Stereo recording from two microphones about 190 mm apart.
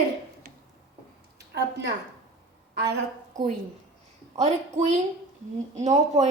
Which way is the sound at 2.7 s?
65° right (ahead or behind).